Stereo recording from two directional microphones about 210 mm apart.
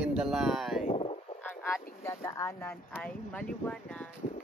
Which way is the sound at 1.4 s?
10° left (ahead or behind).